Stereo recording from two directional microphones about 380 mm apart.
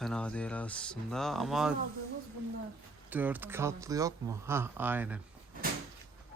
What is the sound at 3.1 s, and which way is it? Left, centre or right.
Speech, centre.